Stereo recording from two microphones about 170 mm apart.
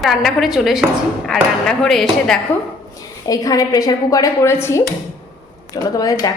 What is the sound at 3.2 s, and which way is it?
Speech, 20° left (ahead or behind).